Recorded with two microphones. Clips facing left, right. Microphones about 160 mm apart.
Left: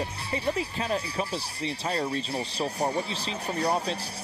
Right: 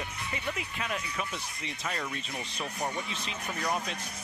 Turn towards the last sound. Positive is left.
turn(degrees=30)  # may be behind; listen again after turning